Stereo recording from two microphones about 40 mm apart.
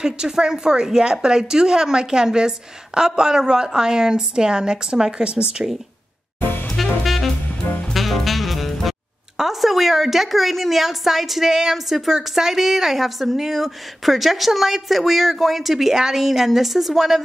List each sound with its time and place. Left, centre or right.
0.0 s a woman's voice: centre
6.4 s music: left
6.7 s music: centre
9.4 s a woman's voice: centre